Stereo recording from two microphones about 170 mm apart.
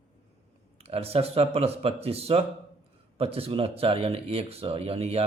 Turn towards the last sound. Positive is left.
turn(degrees=-35)  # may be behind; listen again after turning